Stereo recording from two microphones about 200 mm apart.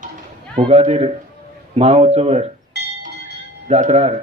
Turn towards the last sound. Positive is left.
turn(degrees=-35)  # may be behind; listen again after turning